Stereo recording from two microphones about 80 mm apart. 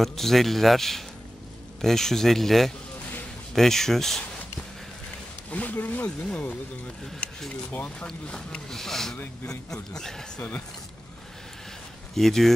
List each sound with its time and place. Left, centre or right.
0.0 s a man's voice: centre
5.5 s a sound: centre
6.0 s speech: centre
7.7 s speech: left
8.3 s speech: centre
12.2 s a man's voice: centre